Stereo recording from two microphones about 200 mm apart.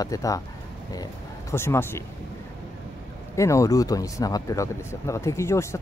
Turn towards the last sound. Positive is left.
turn(degrees=15)  # may be behind; listen again after turning